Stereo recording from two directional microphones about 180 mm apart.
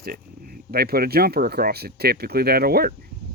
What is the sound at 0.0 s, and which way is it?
Speech, 55° right (ahead or behind).